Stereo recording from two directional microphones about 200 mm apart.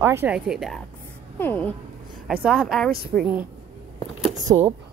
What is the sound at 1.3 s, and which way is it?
Speech, 10° left (ahead or behind).